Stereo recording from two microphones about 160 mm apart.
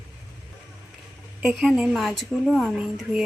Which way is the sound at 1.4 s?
5° right (ahead or behind).